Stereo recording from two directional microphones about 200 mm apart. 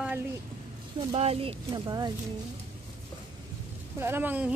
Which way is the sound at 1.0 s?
30° right (ahead or behind).